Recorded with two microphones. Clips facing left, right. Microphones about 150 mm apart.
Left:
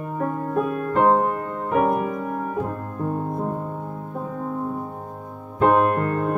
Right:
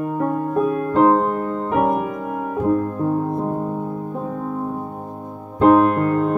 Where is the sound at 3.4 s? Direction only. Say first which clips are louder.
Right 5 dB; 25° right (ahead or behind).